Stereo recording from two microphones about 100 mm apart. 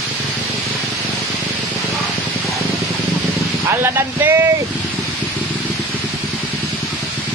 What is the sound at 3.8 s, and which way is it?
Speech, 25° right (ahead or behind).